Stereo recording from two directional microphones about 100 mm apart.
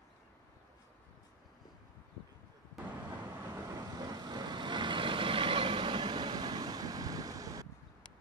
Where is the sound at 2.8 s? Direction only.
20° right (ahead or behind).